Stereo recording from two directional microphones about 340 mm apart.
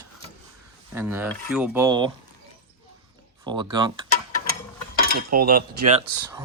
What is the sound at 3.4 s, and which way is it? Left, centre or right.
Speech, centre.